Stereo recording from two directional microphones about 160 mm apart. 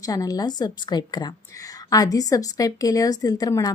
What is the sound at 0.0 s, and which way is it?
A woman's voice, 20° left (ahead or behind).